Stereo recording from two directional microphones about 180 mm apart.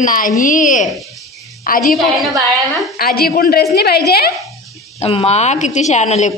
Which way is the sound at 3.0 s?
55° left (ahead or behind).